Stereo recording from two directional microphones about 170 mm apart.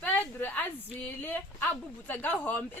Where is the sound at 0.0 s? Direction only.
10° left (ahead or behind).